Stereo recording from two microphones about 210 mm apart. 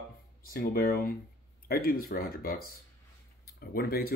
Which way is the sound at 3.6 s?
45° left (ahead or behind).